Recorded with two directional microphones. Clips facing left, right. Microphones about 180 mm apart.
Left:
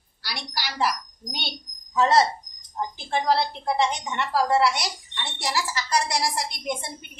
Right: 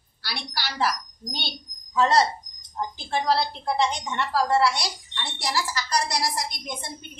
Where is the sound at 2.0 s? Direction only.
25° left (ahead or behind).